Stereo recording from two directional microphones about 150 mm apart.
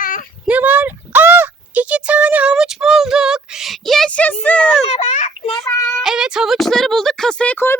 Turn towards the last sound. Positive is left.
turn(degrees=15)  # may be behind; listen again after turning